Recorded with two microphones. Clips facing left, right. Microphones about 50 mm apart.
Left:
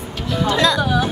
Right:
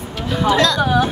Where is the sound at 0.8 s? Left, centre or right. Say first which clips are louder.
Right 3 dB; centre.